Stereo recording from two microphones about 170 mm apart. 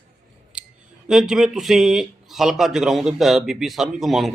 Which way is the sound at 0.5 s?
5° right (ahead or behind).